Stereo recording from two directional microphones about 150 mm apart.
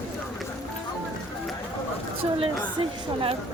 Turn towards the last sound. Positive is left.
turn(degrees=-40)  # may be behind; listen again after turning